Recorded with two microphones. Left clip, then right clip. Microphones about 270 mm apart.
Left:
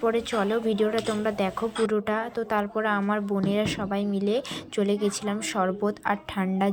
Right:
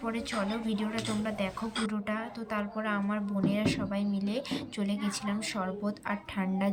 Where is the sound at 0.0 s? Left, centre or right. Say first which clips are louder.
Left 9 dB; centre.